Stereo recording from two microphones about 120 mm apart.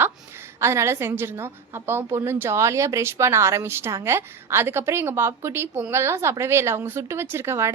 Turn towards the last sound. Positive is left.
turn(degrees=-20)  # may be behind; listen again after turning